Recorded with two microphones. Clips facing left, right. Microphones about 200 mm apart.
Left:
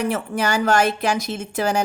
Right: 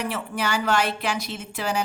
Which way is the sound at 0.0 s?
45° left (ahead or behind).